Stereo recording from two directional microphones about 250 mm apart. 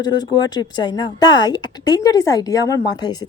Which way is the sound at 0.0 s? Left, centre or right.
Centre.